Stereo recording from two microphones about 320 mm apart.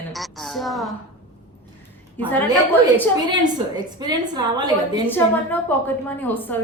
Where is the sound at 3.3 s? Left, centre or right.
Centre.